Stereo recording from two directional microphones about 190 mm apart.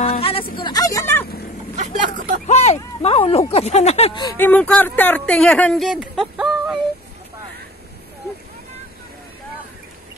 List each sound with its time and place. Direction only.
0.0 s a sound: 30° left (ahead or behind)
0.6 s vehicle: 20° left (ahead or behind)
1.8 s vehicle: 45° right (ahead or behind)
2.4 s speech: 35° left (ahead or behind)
4.4 s speech: 10° left (ahead or behind)